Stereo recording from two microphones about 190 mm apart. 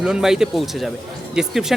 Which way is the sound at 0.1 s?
5° right (ahead or behind).